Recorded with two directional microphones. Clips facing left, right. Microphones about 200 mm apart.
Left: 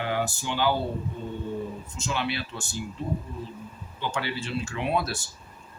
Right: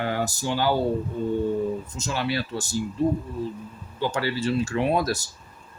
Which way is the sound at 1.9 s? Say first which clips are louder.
Right 3 dB; 40° right (ahead or behind).